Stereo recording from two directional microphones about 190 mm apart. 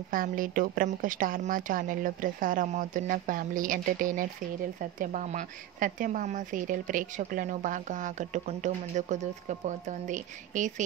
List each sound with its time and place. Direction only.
0.1 s a woman's voice: 45° right (ahead or behind)